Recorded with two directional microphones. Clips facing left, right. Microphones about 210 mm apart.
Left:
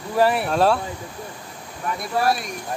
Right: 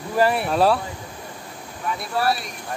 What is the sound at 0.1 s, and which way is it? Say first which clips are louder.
Speech: left 1 dB; centre (ahead or behind).